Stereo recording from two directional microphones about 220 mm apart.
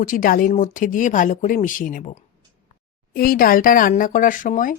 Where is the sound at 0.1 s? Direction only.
40° left (ahead or behind).